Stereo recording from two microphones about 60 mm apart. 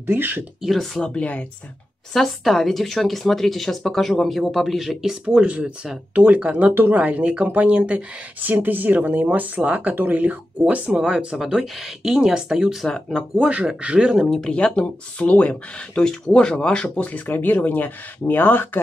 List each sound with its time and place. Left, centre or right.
0.0 s speech: right
0.6 s speech: centre
1.0 s speech: centre
2.1 s speech: centre
5.2 s speech: centre
6.7 s speech: right
7.0 s speech: right
10.6 s speech: centre
12.8 s speech: centre
13.4 s speech: centre
14.4 s speech: centre; by 18.8 s left